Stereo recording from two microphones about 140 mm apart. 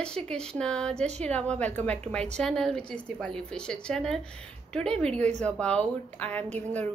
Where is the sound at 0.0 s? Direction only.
5° left (ahead or behind).